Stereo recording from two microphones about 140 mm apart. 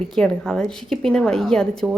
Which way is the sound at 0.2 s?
5° left (ahead or behind).